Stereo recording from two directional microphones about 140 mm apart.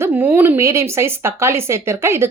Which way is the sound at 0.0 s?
15° right (ahead or behind).